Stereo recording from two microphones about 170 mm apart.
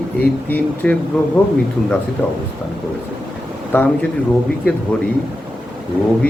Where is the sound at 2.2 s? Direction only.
10° left (ahead or behind).